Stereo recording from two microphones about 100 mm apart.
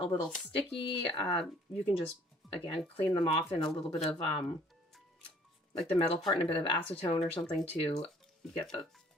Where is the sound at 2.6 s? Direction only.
60° left (ahead or behind).